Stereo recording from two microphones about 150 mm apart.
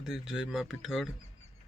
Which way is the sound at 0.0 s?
5° right (ahead or behind).